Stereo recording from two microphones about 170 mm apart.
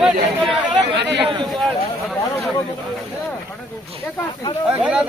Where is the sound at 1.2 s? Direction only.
30° right (ahead or behind).